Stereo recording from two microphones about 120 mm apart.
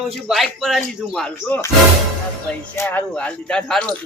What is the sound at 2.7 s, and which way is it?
Speech, 15° left (ahead or behind).